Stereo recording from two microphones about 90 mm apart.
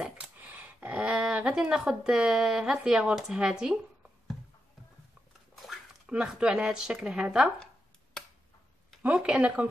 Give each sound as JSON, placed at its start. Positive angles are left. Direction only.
{"t": 0.4, "sound": "a sound", "side_deg": -20}
{"t": 0.7, "sound": "speech", "side_deg": -15}
{"t": 5.7, "sound": "speech", "side_deg": -10}
{"t": 9.0, "sound": "speech", "side_deg": -15}